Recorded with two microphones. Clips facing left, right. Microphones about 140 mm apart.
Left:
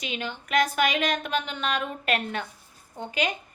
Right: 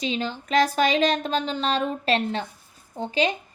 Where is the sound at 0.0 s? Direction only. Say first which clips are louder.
Right 6 dB; 35° right (ahead or behind).